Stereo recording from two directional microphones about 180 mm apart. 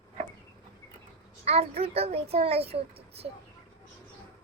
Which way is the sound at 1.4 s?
35° right (ahead or behind).